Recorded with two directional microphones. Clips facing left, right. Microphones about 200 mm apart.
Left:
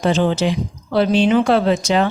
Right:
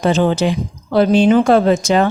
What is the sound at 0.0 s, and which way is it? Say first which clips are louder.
A woman's voice: right 2 dB; 45° right (ahead or behind).